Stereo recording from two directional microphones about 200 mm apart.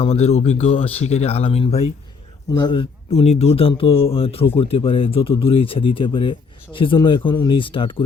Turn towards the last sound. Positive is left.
turn(degrees=25)  # may be behind; listen again after turning